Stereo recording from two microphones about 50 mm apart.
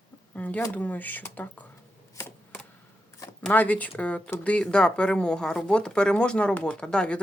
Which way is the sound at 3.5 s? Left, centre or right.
Left.